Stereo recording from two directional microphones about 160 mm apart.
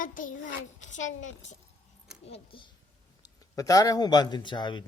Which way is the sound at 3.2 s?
20° left (ahead or behind).